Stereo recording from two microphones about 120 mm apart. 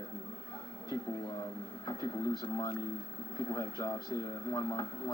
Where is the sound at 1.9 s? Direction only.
35° left (ahead or behind).